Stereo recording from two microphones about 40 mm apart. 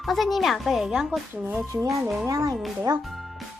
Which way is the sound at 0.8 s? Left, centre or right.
Centre.